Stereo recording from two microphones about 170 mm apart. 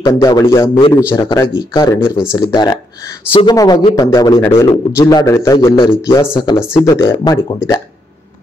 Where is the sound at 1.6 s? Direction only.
25° left (ahead or behind).